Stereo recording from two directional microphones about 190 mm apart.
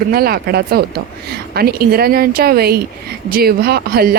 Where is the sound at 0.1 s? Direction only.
55° right (ahead or behind).